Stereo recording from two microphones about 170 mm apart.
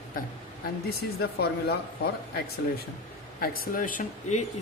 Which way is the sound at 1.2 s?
70° left (ahead or behind).